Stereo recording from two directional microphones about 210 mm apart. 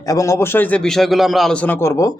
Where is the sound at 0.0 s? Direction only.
15° left (ahead or behind).